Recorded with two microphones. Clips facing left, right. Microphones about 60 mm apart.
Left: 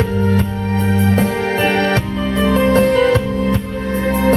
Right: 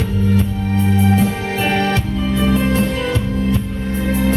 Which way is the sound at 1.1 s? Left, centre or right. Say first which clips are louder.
Left 2 dB; left.